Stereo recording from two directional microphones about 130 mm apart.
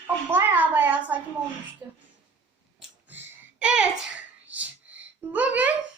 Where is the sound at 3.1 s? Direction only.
10° right (ahead or behind).